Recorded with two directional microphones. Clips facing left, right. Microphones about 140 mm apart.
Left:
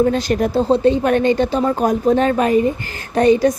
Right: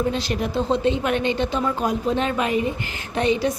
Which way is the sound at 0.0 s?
45° left (ahead or behind).